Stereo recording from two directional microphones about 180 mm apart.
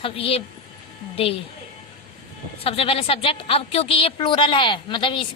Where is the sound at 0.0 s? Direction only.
30° left (ahead or behind).